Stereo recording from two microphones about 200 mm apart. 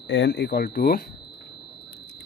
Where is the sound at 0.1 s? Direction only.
60° left (ahead or behind).